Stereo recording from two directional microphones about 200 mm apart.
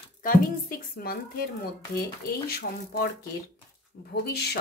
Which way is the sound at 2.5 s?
50° left (ahead or behind).